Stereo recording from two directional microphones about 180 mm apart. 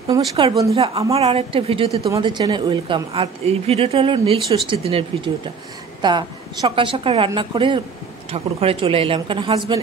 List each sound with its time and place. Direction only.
0.4 s a woman's voice: 30° right (ahead or behind)